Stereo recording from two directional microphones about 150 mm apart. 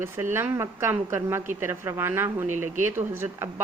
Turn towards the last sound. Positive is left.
turn(degrees=-15)  # may be behind; listen again after turning